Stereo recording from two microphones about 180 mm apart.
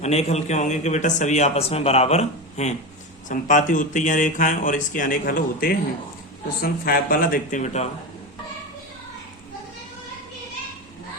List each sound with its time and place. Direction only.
0.0 s a man's voice: 35° left (ahead or behind)